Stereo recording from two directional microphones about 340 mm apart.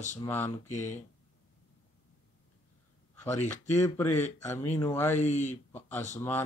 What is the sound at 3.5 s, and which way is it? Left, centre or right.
Speech, centre.